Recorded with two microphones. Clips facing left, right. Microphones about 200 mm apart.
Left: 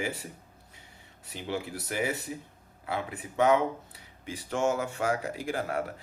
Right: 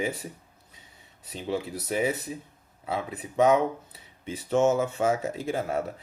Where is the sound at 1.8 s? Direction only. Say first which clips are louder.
Right 4 dB; 20° right (ahead or behind).